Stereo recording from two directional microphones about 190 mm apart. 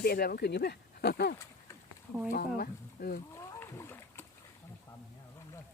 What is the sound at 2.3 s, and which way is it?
Speech, 55° left (ahead or behind).